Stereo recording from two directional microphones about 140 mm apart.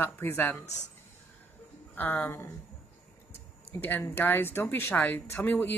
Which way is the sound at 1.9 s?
15° left (ahead or behind).